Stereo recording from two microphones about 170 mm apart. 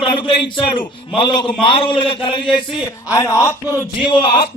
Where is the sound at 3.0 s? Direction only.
20° left (ahead or behind).